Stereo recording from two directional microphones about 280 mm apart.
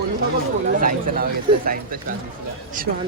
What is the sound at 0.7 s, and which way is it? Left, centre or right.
Speech, right.